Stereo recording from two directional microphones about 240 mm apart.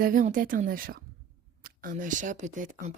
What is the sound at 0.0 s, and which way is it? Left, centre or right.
Speech, right.